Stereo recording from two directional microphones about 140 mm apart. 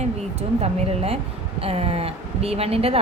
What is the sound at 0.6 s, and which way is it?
A woman's voice, 45° right (ahead or behind).